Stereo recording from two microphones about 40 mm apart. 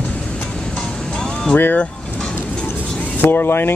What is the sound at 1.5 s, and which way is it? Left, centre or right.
Speech, left.